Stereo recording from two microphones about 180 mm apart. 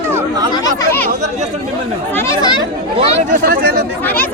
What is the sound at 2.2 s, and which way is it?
Speech, 15° left (ahead or behind).